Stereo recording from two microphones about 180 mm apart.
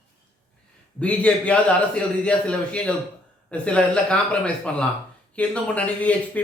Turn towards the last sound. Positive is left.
turn(degrees=10)  # may be behind; listen again after turning